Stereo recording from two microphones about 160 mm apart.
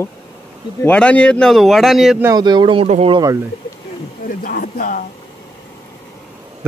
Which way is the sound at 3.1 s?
20° right (ahead or behind).